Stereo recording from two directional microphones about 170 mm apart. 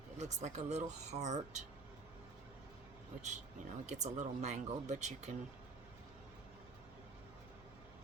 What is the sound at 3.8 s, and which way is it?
Speech, 40° right (ahead or behind).